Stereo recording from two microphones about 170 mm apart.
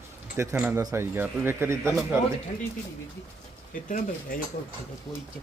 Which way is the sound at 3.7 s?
50° left (ahead or behind).